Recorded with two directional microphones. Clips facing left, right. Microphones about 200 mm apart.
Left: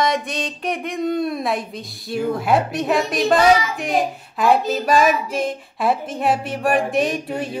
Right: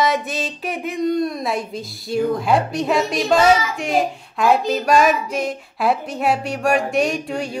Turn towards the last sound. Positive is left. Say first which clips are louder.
# even
turn(degrees=0)  # may be behind; listen again after turning